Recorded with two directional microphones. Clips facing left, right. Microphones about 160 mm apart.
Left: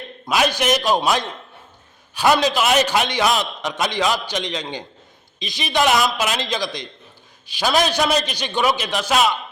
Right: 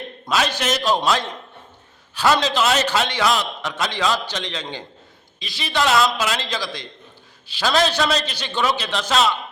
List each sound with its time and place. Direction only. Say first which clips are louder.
0.3 s a man's voice: left 3 dB; 15° left (ahead or behind)